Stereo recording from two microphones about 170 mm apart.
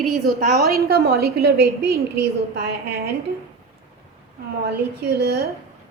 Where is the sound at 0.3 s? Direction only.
60° right (ahead or behind).